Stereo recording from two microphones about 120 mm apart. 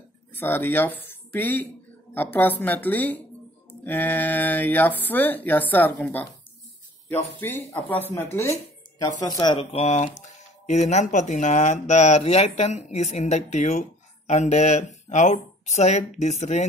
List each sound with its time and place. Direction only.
0.3 s speech: 20° left (ahead or behind)
7.3 s speech: 15° left (ahead or behind)
9.0 s speech: 30° left (ahead or behind); by 16.6 s 75° left (ahead or behind)